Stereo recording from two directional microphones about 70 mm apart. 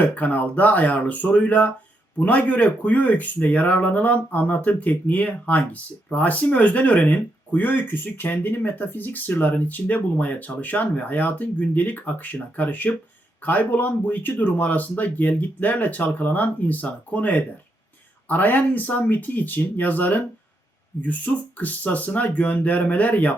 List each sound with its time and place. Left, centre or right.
0.0 s speech: left